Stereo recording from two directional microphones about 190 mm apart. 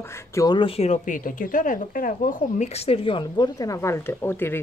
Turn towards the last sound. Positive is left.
turn(degrees=10)  # may be behind; listen again after turning